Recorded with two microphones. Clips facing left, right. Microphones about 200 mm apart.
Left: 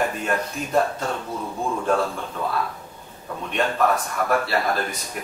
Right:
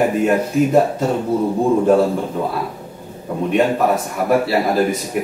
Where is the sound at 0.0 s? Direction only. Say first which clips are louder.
Right 9 dB; 15° right (ahead or behind).